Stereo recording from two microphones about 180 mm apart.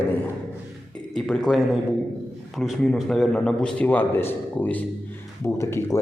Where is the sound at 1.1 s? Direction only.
Centre (ahead or behind).